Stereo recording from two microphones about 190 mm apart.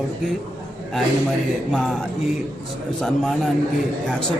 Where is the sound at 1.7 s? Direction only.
5° left (ahead or behind).